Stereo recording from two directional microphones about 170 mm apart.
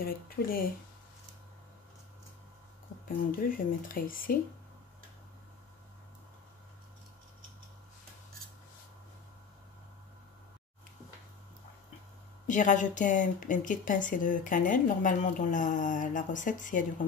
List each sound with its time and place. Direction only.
0.0 s speech: 60° left (ahead or behind)
3.3 s speech: 55° left (ahead or behind)
12.4 s a woman's voice: 45° left (ahead or behind)